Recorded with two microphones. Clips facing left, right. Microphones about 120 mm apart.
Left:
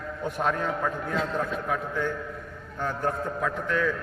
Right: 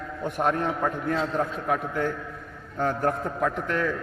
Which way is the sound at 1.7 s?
55° right (ahead or behind).